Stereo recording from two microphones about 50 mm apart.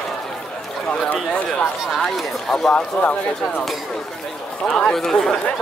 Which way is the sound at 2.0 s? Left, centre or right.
Centre.